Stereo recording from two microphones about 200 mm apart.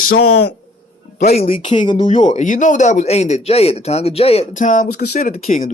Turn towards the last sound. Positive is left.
turn(degrees=40)  # may be behind; listen again after turning